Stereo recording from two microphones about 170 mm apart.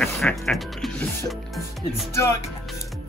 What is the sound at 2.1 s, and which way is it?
Speech, 15° left (ahead or behind).